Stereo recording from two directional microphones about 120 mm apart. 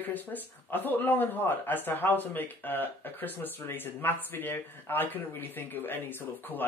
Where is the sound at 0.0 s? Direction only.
15° left (ahead or behind).